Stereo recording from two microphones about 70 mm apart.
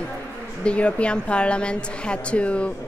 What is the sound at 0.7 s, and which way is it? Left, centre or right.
Speech, centre.